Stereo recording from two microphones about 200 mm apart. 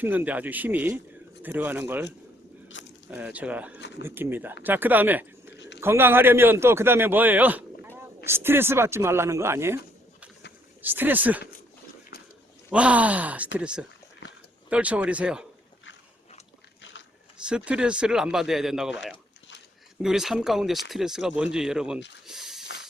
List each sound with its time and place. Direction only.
0.0 s a man's voice: 10° right (ahead or behind)
2.8 s a sound: 65° left (ahead or behind)
3.1 s a man's voice: 5° right (ahead or behind)
3.8 s speech: 60° left (ahead or behind)
4.0 s a man's voice: 10° right (ahead or behind)
5.5 s a sound: 60° left (ahead or behind)
5.8 s a man's voice: 10° right (ahead or behind)
12.1 s a sound: 50° left (ahead or behind)
12.7 s a man's voice: 5° right (ahead or behind)
17.7 s speech: 5° right (ahead or behind)
20.0 s speech: centre (ahead or behind)
22.3 s a sound: centre (ahead or behind)